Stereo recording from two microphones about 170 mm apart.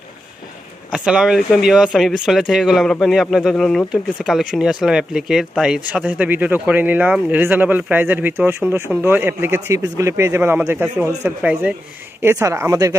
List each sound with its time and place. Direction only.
0.9 s speech: 5° right (ahead or behind)